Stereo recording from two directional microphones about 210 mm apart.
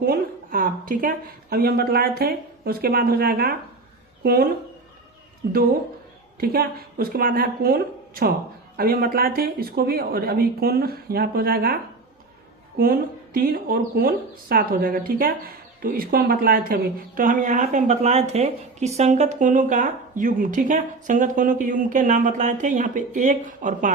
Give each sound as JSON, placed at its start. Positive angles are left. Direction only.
{"t": 0.0, "sound": "a woman's voice", "side_deg": -45}